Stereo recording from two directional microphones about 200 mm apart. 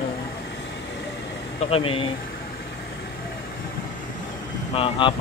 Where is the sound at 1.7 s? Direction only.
25° left (ahead or behind).